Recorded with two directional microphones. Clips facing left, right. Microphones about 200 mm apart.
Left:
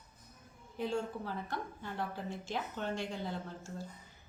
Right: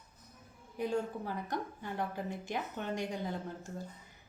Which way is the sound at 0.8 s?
15° right (ahead or behind).